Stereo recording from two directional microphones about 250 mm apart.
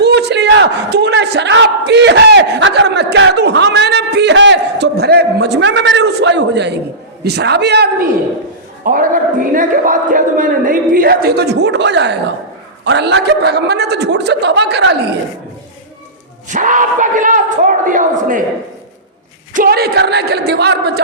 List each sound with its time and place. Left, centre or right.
0.0 s a sound: right
7.3 s a man's voice: right
16.5 s a man's voice: right
19.5 s a man's voice: right